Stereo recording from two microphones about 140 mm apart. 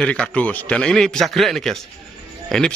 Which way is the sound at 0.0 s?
10° left (ahead or behind).